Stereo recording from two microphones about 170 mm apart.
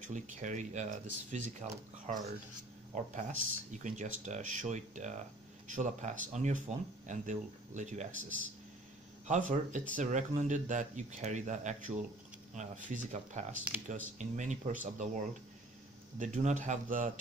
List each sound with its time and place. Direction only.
0.0 s speech: 45° right (ahead or behind)
16.2 s speech: 45° right (ahead or behind)